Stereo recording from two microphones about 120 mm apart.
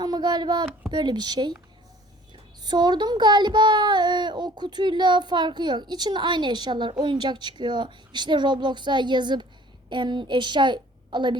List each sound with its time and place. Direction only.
0.0 s a child's voice: 35° right (ahead or behind)